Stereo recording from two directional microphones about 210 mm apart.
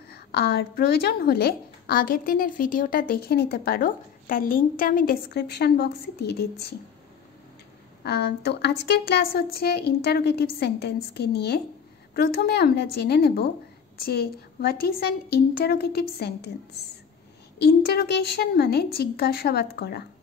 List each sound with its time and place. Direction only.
0.1 s a woman's voice: 50° left (ahead or behind)
8.0 s a woman's voice: 50° left (ahead or behind)
17.6 s a woman's voice: 50° left (ahead or behind)